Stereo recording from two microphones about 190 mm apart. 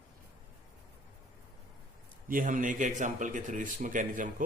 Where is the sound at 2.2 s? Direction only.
45° right (ahead or behind).